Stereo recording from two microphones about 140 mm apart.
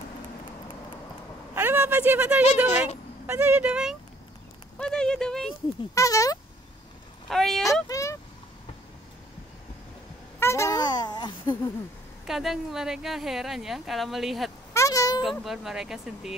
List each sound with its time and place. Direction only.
1.5 s a sound: 15° right (ahead or behind)
2.7 s a woman's voice: 50° left (ahead or behind)
3.3 s speech: 10° right (ahead or behind)
4.7 s a woman's voice: 5° left (ahead or behind)
5.9 s speech: 25° left (ahead or behind)
7.2 s a woman's voice: centre (ahead or behind)
7.9 s vehicle: 20° left (ahead or behind)
10.4 s a child's voice: 20° left (ahead or behind)
12.3 s a woman's voice: 5° right (ahead or behind)
14.7 s a sound: 20° left (ahead or behind)
15.4 s a woman's voice: 5° right (ahead or behind)